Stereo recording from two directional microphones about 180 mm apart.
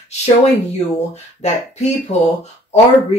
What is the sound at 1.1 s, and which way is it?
Speech, 40° left (ahead or behind).